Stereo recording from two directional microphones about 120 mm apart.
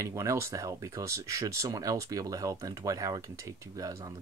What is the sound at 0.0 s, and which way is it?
Speech, 25° right (ahead or behind).